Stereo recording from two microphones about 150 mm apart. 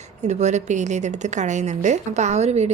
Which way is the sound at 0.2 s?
50° right (ahead or behind).